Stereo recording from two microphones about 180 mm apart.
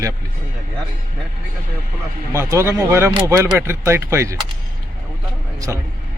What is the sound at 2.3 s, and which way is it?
Speech, 15° right (ahead or behind).